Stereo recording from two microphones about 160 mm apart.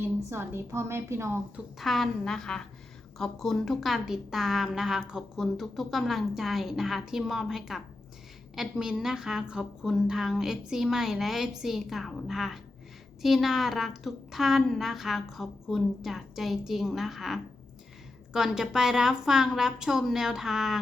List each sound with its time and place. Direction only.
0.0 s a woman's voice: 15° right (ahead or behind)
1.8 s a woman's voice: centre (ahead or behind)